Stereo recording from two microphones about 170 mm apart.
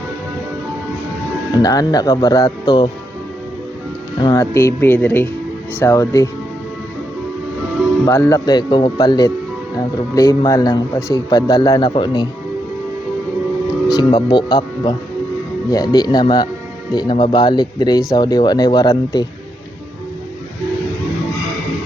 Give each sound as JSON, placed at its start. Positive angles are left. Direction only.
{"t": 1.6, "sound": "speech", "side_deg": 20}
{"t": 4.2, "sound": "speech", "side_deg": 20}
{"t": 8.0, "sound": "speech", "side_deg": 15}
{"t": 13.9, "sound": "speech", "side_deg": 30}